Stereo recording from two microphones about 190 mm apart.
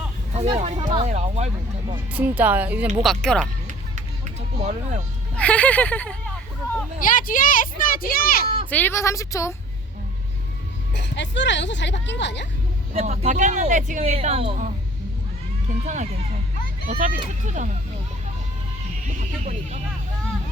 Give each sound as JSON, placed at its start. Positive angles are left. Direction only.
{"t": 0.3, "sound": "speech", "side_deg": -35}
{"t": 2.1, "sound": "speech", "side_deg": -10}
{"t": 3.0, "sound": "speech", "side_deg": 0}
{"t": 4.5, "sound": "speech", "side_deg": -35}
{"t": 5.4, "sound": "a woman's voice", "side_deg": 5}
{"t": 7.0, "sound": "a child's voice", "side_deg": 45}
{"t": 8.7, "sound": "a woman's voice", "side_deg": 10}
{"t": 10.9, "sound": "speech", "side_deg": 65}
{"t": 12.9, "sound": "speech", "side_deg": -40}
{"t": 15.8, "sound": "a child's voice", "side_deg": -40}
{"t": 19.0, "sound": "speech", "side_deg": -40}